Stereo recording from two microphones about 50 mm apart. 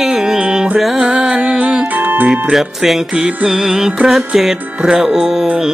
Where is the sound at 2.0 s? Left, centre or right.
Right.